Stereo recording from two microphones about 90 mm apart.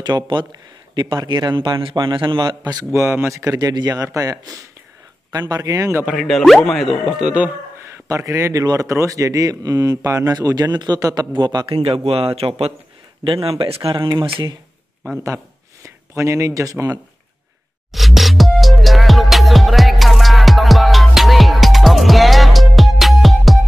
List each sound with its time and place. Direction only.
0.0 s a man's voice: 55° right (ahead or behind); by 2.0 s 70° right (ahead or behind)
2.0 s a man's voice: 60° right (ahead or behind)
2.8 s speech: 30° right (ahead or behind)
5.5 s speech: 40° right (ahead or behind)
6.1 s speech: centre (ahead or behind)
8.1 s speech: 30° right (ahead or behind)
11.3 s a man's voice: 55° right (ahead or behind)
12.1 s speech: 90° right
13.2 s speech: 80° right
15.2 s speech: 35° right (ahead or behind)
17.9 s music: centre (ahead or behind)